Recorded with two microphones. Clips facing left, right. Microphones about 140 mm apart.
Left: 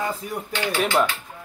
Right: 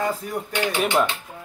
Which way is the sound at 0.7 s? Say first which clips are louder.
Left 1 dB; 20° right (ahead or behind).